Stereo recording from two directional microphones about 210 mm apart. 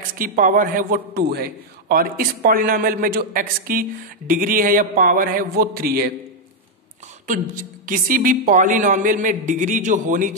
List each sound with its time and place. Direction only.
0.1 s a man's voice: 40° right (ahead or behind)
7.2 s a woman's voice: 40° right (ahead or behind)